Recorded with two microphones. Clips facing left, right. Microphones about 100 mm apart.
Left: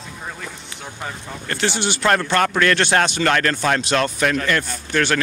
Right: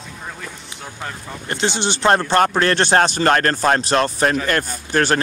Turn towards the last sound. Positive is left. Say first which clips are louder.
# right 2 dB
turn(degrees=-40)  # may be behind; listen again after turning